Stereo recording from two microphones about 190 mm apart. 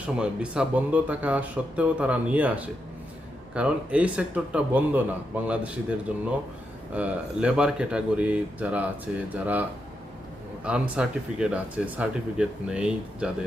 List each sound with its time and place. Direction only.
0.2 s speech: 5° right (ahead or behind)